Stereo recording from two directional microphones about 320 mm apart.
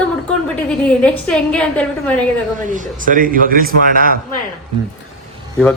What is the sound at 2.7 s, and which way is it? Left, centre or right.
A man's voice, right.